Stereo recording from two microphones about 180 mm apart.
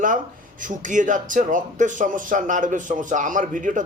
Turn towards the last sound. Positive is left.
turn(degrees=-45)  # may be behind; listen again after turning